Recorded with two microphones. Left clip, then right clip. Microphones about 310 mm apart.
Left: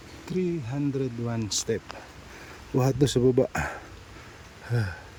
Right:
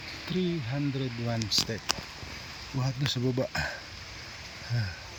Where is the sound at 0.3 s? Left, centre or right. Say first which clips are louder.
Left 3 dB; centre.